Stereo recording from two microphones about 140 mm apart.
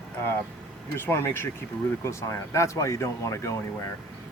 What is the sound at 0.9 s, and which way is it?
Speech, 15° left (ahead or behind).